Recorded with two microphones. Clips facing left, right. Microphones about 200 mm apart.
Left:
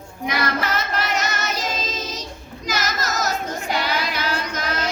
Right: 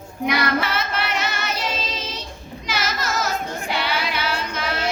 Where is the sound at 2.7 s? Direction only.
40° left (ahead or behind).